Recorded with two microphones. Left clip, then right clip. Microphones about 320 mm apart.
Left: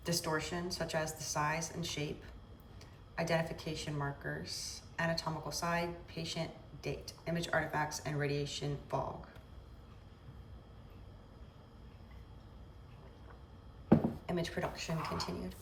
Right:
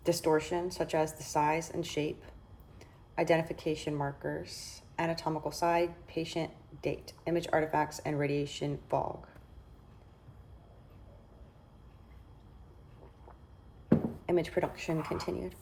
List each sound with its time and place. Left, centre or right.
0.0 s a woman's voice: centre
14.3 s a woman's voice: centre